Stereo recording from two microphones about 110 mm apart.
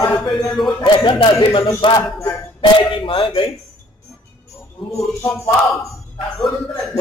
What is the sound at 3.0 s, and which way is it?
Speech, 55° left (ahead or behind).